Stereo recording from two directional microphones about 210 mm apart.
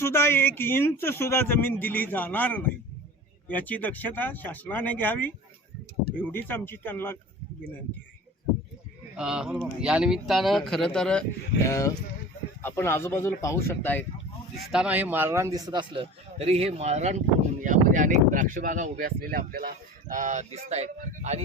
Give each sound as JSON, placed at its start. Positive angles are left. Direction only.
{"t": 0.0, "sound": "speech", "side_deg": 10}
{"t": 9.1, "sound": "speech", "side_deg": -5}
{"t": 14.7, "sound": "speech", "side_deg": -5}